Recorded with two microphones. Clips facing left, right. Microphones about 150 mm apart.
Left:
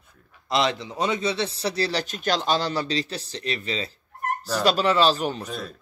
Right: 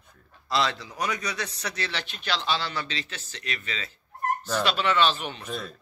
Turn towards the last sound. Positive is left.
turn(degrees=40)  # may be behind; listen again after turning